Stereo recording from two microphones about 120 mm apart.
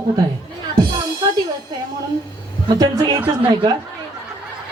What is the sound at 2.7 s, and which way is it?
Speech, 35° right (ahead or behind).